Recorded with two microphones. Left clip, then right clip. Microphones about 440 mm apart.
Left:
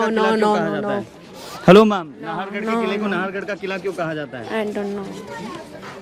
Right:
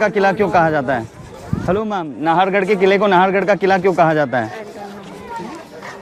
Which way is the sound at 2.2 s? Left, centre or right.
Right.